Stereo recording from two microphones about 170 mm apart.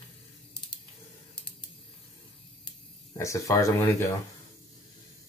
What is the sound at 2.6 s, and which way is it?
Speech, 20° left (ahead or behind).